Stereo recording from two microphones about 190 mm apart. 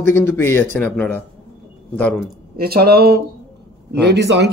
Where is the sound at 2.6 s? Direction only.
55° right (ahead or behind).